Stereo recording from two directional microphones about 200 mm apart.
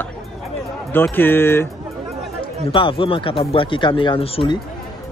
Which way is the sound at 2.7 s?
25° left (ahead or behind).